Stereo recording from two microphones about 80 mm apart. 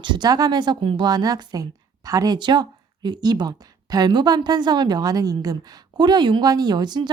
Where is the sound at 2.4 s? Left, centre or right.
Right.